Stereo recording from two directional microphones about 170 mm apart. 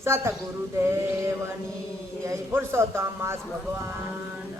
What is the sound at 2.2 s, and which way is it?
A man's voice, 15° right (ahead or behind).